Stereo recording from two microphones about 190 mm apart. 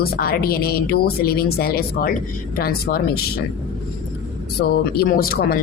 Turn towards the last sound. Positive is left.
turn(degrees=50)  # may be behind; listen again after turning